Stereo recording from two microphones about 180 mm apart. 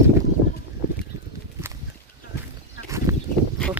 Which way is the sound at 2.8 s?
15° right (ahead or behind).